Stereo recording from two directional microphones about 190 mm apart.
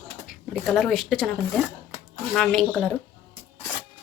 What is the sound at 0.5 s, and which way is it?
Speech, centre (ahead or behind).